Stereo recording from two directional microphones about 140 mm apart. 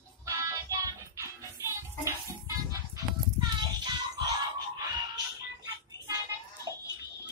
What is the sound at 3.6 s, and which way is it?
Music, 30° right (ahead or behind).